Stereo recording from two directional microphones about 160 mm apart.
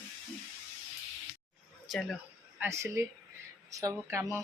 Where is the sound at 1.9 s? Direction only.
Centre (ahead or behind).